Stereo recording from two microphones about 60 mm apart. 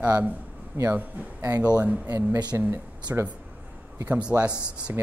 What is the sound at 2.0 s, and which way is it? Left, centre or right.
Speech, right.